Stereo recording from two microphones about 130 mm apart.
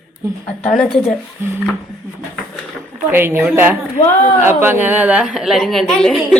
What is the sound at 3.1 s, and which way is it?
A woman's voice, 15° right (ahead or behind).